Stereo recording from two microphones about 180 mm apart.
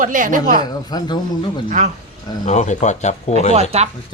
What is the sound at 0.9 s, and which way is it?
Speech, 25° left (ahead or behind).